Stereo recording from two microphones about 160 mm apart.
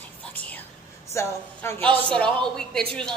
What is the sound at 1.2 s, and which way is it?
Speech, 20° left (ahead or behind).